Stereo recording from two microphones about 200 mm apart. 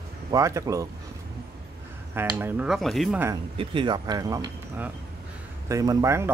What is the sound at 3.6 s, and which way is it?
Speech, 25° right (ahead or behind).